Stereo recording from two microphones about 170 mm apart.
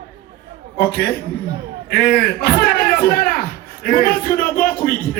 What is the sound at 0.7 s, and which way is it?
A man's voice, 65° left (ahead or behind).